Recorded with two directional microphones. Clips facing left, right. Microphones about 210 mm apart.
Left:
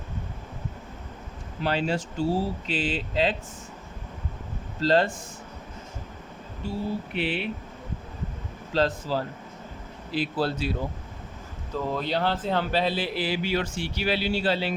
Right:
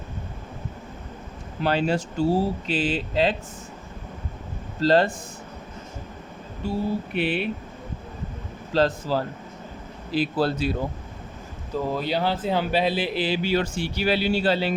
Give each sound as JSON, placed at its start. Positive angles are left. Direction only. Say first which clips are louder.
{"t": 1.6, "sound": "speech", "louder": "right 3 dB", "side_deg": -45}
{"t": 4.8, "sound": "speech", "louder": "right 3 dB", "side_deg": -40}
{"t": 7.2, "sound": "speech", "louder": "right 4 dB", "side_deg": -55}
{"t": 8.7, "sound": "speech", "louder": "right 3 dB", "side_deg": -40}
{"t": 11.8, "sound": "speech", "louder": "right 2 dB", "side_deg": -5}